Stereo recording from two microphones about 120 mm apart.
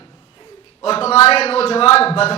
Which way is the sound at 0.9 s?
55° left (ahead or behind).